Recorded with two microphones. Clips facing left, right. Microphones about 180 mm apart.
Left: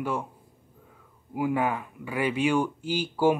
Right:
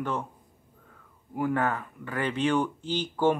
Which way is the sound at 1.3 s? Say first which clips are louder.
Left 1 dB; 10° left (ahead or behind).